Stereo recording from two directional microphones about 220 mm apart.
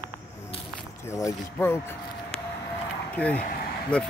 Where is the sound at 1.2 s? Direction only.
10° left (ahead or behind).